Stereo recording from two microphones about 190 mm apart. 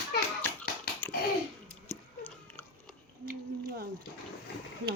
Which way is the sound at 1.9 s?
10° left (ahead or behind).